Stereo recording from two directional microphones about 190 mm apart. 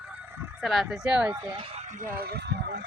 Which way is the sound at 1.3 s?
30° right (ahead or behind).